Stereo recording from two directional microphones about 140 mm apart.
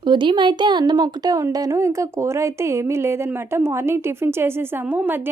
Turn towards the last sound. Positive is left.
turn(degrees=-15)  # may be behind; listen again after turning